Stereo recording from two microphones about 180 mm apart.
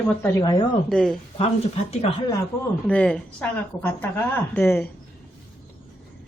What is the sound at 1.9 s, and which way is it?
Speech, 35° left (ahead or behind).